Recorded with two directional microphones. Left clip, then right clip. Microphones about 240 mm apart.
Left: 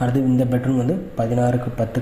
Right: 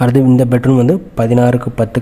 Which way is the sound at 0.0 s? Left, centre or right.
Right.